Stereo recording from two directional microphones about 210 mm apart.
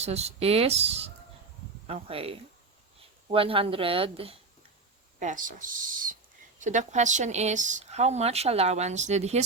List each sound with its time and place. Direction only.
0.0 s speech: 30° right (ahead or behind)
5.2 s speech: 40° right (ahead or behind)